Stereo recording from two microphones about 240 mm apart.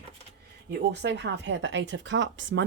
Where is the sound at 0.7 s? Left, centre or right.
Right.